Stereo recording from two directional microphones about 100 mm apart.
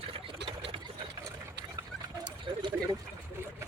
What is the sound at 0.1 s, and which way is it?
Sewing machine, 65° right (ahead or behind).